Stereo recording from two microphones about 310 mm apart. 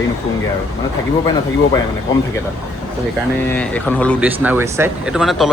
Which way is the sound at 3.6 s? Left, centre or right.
Centre.